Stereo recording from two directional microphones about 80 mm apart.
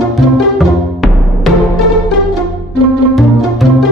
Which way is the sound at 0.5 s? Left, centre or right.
Centre.